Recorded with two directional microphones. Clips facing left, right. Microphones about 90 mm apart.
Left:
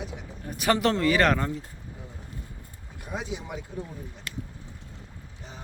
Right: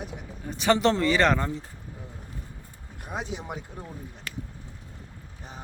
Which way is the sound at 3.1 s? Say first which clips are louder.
Even; 40° right (ahead or behind).